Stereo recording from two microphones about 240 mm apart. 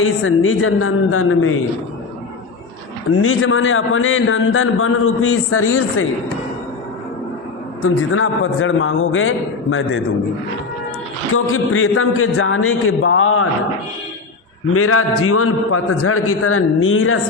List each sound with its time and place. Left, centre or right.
0.0 s a man's voice: left
3.2 s a man's voice: left
7.8 s a man's voice: left
11.3 s a man's voice: left
14.7 s a man's voice: left